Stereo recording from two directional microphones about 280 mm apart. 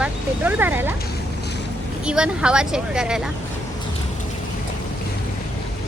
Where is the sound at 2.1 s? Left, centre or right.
Centre.